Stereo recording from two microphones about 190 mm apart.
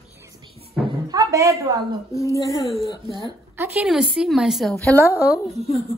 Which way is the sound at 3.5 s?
10° right (ahead or behind).